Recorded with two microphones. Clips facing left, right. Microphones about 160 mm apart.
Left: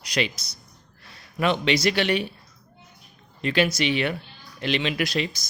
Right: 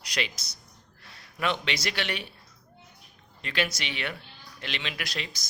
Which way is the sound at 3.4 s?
20° left (ahead or behind).